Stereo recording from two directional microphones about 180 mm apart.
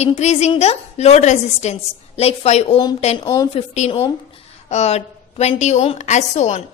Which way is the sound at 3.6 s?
35° left (ahead or behind).